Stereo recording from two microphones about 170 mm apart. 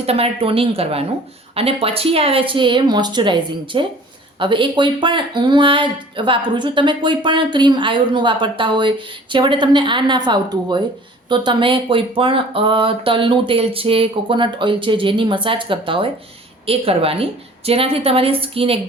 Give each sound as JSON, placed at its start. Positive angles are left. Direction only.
{"t": 0.0, "sound": "speech", "side_deg": -35}